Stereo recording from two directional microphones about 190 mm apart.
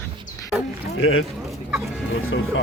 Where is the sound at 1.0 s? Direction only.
90° left.